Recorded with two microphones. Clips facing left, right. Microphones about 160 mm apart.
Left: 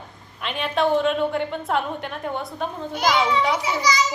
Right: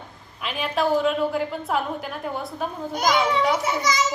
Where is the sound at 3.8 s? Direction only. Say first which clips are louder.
Left 2 dB; 50° right (ahead or behind).